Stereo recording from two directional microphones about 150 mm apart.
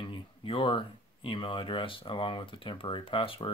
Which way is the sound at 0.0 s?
35° left (ahead or behind).